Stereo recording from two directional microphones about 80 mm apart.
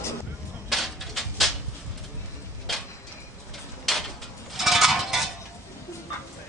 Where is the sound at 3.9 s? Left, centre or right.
Centre.